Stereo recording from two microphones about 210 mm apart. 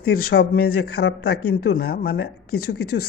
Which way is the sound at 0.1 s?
45° left (ahead or behind).